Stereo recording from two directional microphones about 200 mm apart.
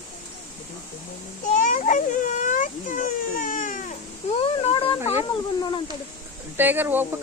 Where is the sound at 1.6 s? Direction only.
40° left (ahead or behind).